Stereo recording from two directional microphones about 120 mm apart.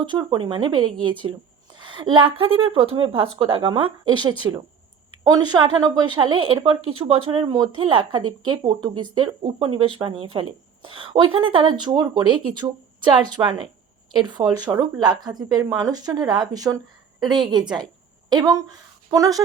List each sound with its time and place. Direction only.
0.0 s speech: 40° right (ahead or behind)
7.4 s speech: 35° right (ahead or behind)
7.8 s speech: 50° right (ahead or behind)
8.6 s speech: 40° right (ahead or behind)